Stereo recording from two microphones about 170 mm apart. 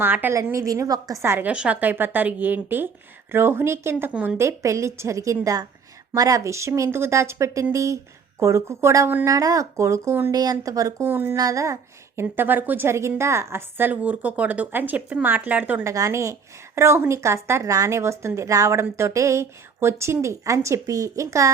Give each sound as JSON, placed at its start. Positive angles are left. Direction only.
{"t": 0.0, "sound": "speech", "side_deg": -10}